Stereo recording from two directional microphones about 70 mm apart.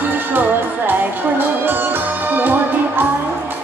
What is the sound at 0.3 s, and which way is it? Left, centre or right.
Music, right.